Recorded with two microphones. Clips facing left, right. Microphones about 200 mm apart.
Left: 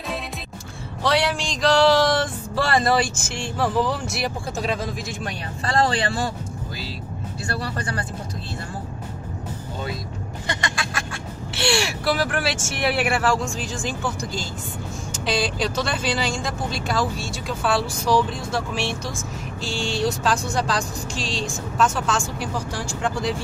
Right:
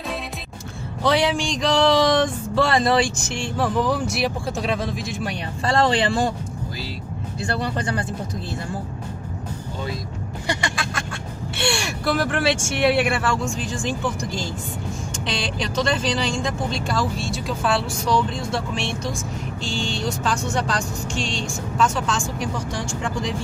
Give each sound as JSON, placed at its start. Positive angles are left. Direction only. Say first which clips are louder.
{"t": 1.0, "sound": "speech", "louder": "right 2 dB", "side_deg": 0}
{"t": 4.2, "sound": "speech", "louder": "right 3 dB", "side_deg": 0}
{"t": 5.6, "sound": "speech", "louder": "right 2 dB", "side_deg": -30}
{"t": 10.4, "sound": "quack", "louder": "right 3 dB", "side_deg": -10}
{"t": 10.8, "sound": "a sound", "louder": "right 1 dB", "side_deg": 5}
{"t": 11.5, "sound": "speech", "louder": "left 2 dB", "side_deg": 5}
{"t": 15.2, "sound": "speech", "louder": "left 4 dB", "side_deg": 5}
{"t": 21.1, "sound": "vehicle", "louder": "right 1 dB", "side_deg": 35}
{"t": 21.7, "sound": "speech", "louder": "even", "side_deg": 5}